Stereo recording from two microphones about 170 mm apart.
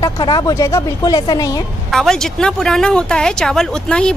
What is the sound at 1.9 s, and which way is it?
Speech, 5° left (ahead or behind).